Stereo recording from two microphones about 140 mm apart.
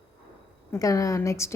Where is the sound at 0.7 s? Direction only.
25° left (ahead or behind).